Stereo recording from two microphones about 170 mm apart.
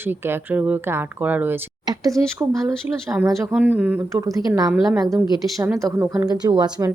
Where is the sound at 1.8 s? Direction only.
20° right (ahead or behind).